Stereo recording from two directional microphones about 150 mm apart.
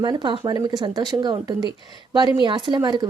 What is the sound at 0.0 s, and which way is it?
Speech, 30° right (ahead or behind).